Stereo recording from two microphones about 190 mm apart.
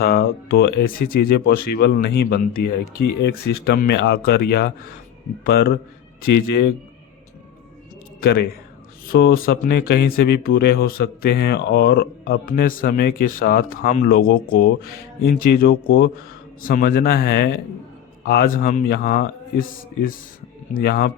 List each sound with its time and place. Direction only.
0.0 s speech: 55° left (ahead or behind)
8.2 s speech: 60° left (ahead or behind)
20.7 s speech: 50° left (ahead or behind)